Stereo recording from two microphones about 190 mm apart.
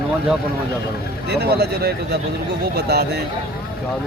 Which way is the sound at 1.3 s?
60° right (ahead or behind).